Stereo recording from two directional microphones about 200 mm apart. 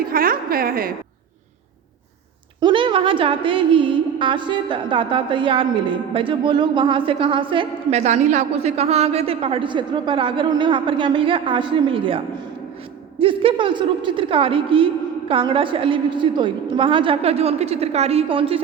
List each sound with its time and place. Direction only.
0.0 s a woman's voice: 45° right (ahead or behind)
2.6 s a woman's voice: 25° right (ahead or behind)